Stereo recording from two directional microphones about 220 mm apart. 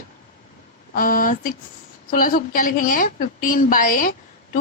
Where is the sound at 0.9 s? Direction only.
40° left (ahead or behind).